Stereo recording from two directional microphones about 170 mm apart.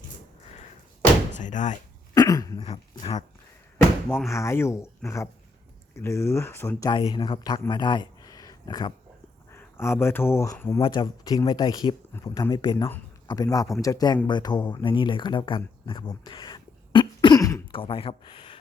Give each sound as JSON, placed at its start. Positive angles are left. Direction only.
{"t": 1.3, "sound": "speech", "side_deg": 45}
{"t": 2.1, "sound": "dog", "side_deg": 20}
{"t": 3.0, "sound": "speech", "side_deg": 30}
{"t": 4.3, "sound": "speech", "side_deg": 15}
{"t": 7.7, "sound": "a sound", "side_deg": 25}
{"t": 9.5, "sound": "speech", "side_deg": 15}
{"t": 10.8, "sound": "speech", "side_deg": 30}
{"t": 12.7, "sound": "speech", "side_deg": 15}